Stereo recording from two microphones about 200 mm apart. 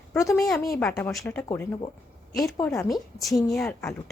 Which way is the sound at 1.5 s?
20° left (ahead or behind).